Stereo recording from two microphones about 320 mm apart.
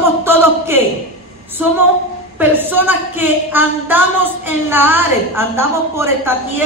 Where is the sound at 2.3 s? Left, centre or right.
Centre.